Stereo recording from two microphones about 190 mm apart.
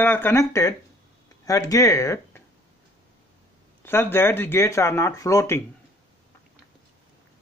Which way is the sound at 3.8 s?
10° left (ahead or behind).